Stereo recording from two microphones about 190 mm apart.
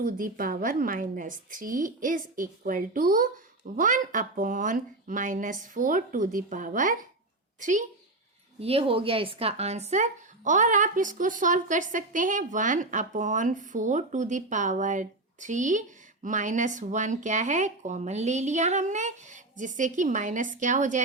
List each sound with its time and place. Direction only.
0.0 s a woman's voice: 50° right (ahead or behind)
8.6 s a woman's voice: 30° right (ahead or behind)